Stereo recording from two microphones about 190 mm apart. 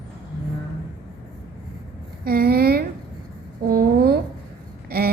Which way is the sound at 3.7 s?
55° right (ahead or behind).